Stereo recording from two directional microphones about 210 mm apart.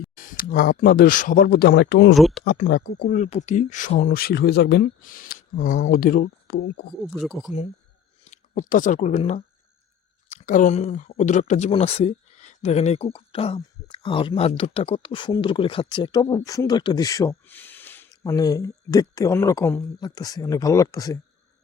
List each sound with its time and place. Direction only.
0.2 s speech: 40° left (ahead or behind)
2.1 s speech: centre (ahead or behind)
2.4 s speech: 50° left (ahead or behind)
7.0 s speech: centre (ahead or behind)
8.3 s speech: 35° left (ahead or behind); by 21.2 s 15° left (ahead or behind)